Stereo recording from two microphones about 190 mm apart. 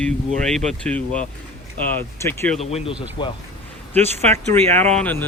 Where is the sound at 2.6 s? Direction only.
35° left (ahead or behind).